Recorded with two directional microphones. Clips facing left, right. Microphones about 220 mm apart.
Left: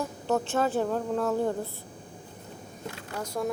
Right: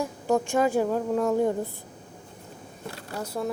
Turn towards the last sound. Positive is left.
turn(degrees=-5)  # may be behind; listen again after turning